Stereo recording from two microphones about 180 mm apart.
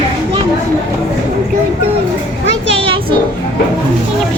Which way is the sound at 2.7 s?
30° right (ahead or behind).